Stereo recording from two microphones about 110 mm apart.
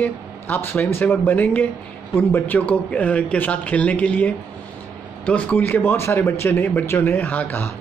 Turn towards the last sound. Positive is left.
turn(degrees=15)  # may be behind; listen again after turning